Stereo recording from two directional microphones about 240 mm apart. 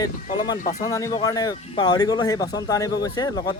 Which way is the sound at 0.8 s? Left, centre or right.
Centre.